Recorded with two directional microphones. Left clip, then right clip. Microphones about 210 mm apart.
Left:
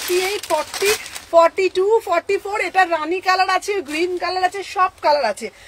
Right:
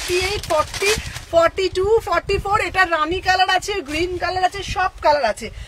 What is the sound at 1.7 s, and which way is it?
A woman's voice, 20° right (ahead or behind).